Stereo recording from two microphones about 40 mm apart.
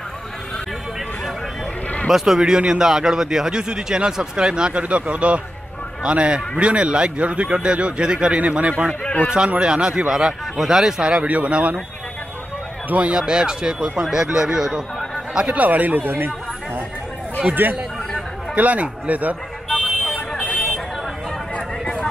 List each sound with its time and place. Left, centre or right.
2.0 s speech: centre
11.2 s a man's voice: right
13.1 s speech: centre
15.4 s a man's voice: right
17.4 s a man's voice: right
19.7 s vehicle: centre
20.2 s car alarm: left